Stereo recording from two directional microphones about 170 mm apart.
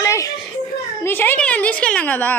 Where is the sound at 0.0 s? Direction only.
20° left (ahead or behind).